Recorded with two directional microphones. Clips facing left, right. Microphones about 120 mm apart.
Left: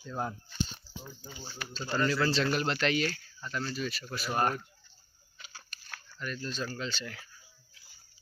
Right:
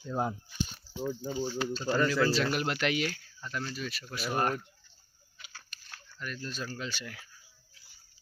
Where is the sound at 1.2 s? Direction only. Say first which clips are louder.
Right 12 dB; 30° right (ahead or behind).